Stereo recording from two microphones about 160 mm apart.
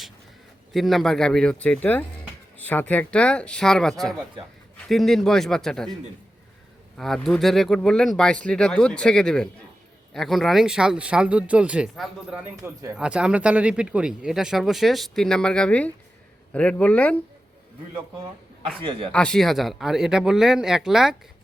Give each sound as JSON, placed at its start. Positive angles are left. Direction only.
{"t": 0.7, "sound": "speech", "side_deg": 0}
{"t": 6.9, "sound": "speech", "side_deg": 0}
{"t": 18.8, "sound": "speech", "side_deg": -35}
{"t": 19.1, "sound": "speech", "side_deg": 5}